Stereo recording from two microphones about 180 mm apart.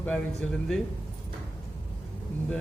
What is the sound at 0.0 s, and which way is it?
Speech, 5° left (ahead or behind).